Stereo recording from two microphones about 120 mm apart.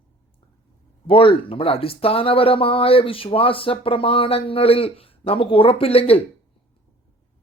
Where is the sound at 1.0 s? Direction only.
50° left (ahead or behind).